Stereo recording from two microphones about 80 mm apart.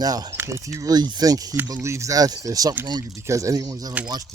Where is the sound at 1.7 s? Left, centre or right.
Right.